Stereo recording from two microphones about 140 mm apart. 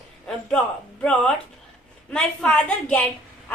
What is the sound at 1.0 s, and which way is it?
A woman's voice, 5° left (ahead or behind).